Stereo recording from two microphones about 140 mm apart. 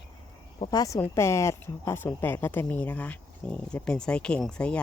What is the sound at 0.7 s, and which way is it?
Speech, 25° left (ahead or behind).